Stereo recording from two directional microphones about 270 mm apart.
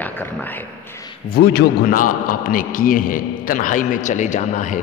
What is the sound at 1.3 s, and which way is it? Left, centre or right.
A man's voice, left.